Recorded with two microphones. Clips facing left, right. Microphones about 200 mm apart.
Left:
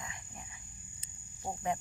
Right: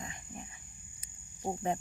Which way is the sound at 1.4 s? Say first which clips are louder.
Right 4 dB; 20° right (ahead or behind).